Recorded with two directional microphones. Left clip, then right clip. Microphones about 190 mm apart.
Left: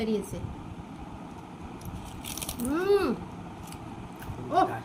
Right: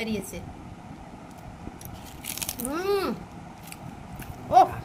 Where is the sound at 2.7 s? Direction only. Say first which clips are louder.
Left 2 dB; 65° right (ahead or behind).